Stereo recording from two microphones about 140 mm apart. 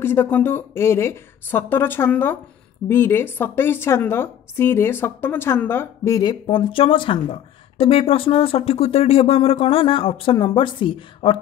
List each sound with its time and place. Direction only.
0.0 s a woman's voice: 15° left (ahead or behind)
6.4 s speech: 35° left (ahead or behind)